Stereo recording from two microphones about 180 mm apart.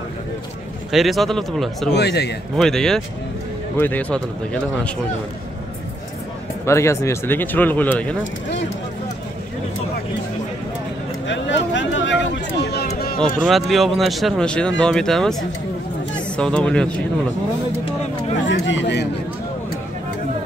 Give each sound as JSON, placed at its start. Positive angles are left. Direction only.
{"t": 0.9, "sound": "speech", "side_deg": 0}
{"t": 1.9, "sound": "a man's voice", "side_deg": 65}
{"t": 2.5, "sound": "speech", "side_deg": 5}
{"t": 6.6, "sound": "speech", "side_deg": 15}
{"t": 11.2, "sound": "a sound", "side_deg": 90}
{"t": 13.5, "sound": "speech", "side_deg": 0}
{"t": 16.3, "sound": "speech", "side_deg": 5}
{"t": 18.5, "sound": "speech", "side_deg": 90}